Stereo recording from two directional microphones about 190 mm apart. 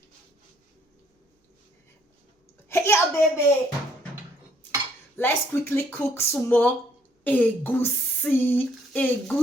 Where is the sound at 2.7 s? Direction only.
15° left (ahead or behind).